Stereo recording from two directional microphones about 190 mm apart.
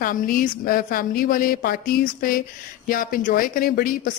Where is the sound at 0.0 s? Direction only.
45° left (ahead or behind).